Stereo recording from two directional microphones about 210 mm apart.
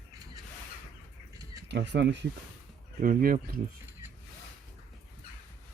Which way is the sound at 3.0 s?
40° right (ahead or behind).